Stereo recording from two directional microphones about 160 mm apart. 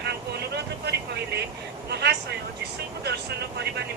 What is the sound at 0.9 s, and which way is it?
Speech, 90° right.